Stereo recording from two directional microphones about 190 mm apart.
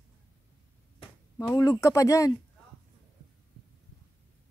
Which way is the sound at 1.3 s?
20° left (ahead or behind).